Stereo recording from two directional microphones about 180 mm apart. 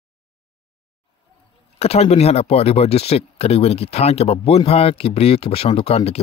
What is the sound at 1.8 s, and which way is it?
Speech, 35° left (ahead or behind).